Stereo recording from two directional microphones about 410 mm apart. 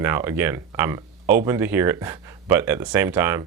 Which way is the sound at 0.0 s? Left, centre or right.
Centre.